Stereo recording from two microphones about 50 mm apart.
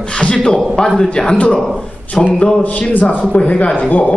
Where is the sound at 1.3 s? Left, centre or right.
Left.